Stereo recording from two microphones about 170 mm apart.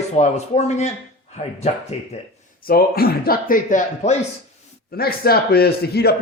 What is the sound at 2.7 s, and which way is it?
Speech, 60° left (ahead or behind).